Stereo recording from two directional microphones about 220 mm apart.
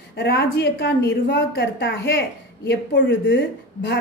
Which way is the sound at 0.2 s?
50° left (ahead or behind).